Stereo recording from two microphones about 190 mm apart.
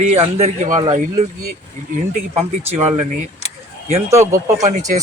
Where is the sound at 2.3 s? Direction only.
35° right (ahead or behind).